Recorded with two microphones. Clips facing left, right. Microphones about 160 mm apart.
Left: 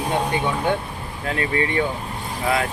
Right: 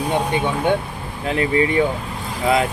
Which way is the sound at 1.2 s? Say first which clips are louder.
Right 5 dB; 20° right (ahead or behind).